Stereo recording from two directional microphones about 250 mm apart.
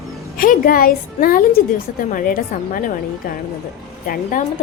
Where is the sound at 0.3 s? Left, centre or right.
Left.